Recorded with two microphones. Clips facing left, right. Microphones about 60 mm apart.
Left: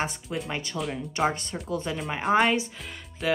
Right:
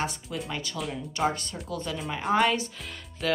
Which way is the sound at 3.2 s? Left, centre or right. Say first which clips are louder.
Left 1 dB; centre.